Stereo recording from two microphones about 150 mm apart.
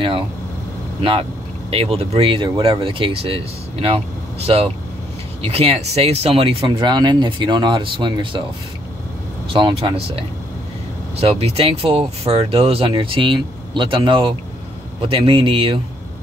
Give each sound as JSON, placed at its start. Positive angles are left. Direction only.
{"t": 1.7, "sound": "speech", "side_deg": -40}
{"t": 9.5, "sound": "speech", "side_deg": -35}